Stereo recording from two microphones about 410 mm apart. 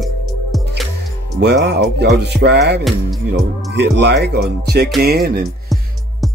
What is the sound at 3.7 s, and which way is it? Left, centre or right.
Speech, right.